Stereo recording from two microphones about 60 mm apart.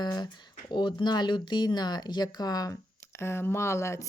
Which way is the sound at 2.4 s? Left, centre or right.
Left.